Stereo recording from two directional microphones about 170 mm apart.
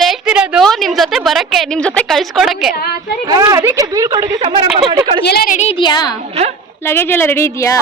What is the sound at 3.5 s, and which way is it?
Speech, 15° right (ahead or behind).